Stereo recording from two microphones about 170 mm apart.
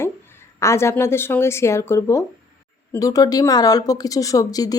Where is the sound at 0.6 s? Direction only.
15° left (ahead or behind).